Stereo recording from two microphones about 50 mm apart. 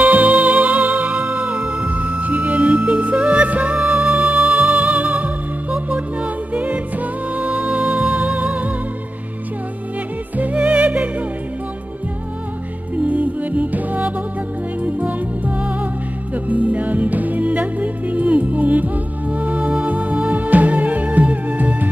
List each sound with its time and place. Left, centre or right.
0.0 s music: right
10.3 s music: right
12.9 s music: right